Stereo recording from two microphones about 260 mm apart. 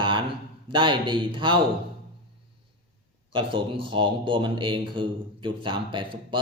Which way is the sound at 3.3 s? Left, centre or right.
Centre.